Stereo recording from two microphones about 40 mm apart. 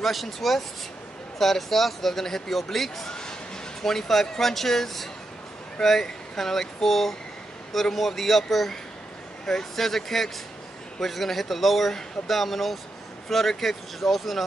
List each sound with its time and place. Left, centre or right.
0.0 s speech: centre
3.1 s a sound: centre
3.8 s speech: centre